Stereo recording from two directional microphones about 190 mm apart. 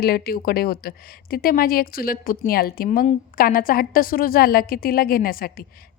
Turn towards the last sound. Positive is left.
turn(degrees=50)  # may be behind; listen again after turning